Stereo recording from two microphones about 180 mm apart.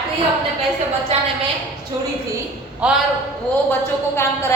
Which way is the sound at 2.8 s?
5° right (ahead or behind).